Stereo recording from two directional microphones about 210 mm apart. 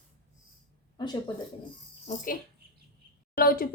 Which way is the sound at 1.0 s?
20° left (ahead or behind).